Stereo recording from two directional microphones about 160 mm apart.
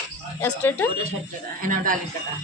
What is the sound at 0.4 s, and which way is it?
Speech, 10° left (ahead or behind).